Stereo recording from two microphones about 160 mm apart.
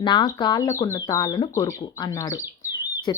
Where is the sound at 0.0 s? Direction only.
30° left (ahead or behind).